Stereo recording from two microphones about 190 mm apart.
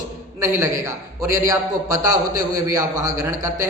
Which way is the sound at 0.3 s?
15° right (ahead or behind).